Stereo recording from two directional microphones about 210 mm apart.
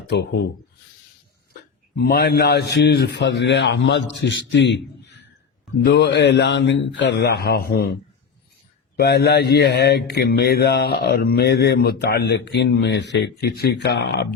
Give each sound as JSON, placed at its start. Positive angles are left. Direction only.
{"t": 0.1, "sound": "a man's voice", "side_deg": 55}
{"t": 2.0, "sound": "a man's voice", "side_deg": 45}
{"t": 5.8, "sound": "a man's voice", "side_deg": 55}
{"t": 9.0, "sound": "a man's voice", "side_deg": 50}